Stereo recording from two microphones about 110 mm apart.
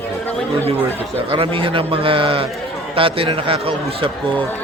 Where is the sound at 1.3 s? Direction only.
55° right (ahead or behind).